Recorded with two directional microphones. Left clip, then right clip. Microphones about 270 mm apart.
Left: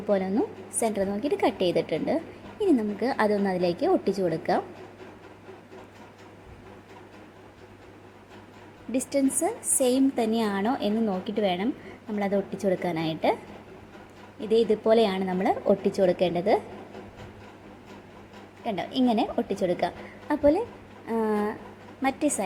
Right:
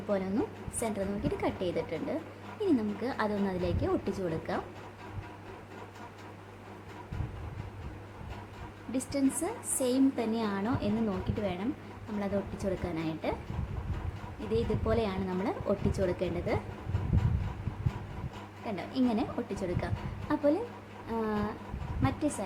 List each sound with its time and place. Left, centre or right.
0.8 s a woman's voice: centre
8.9 s a woman's voice: centre
14.5 s a woman's voice: centre
18.6 s a woman's voice: centre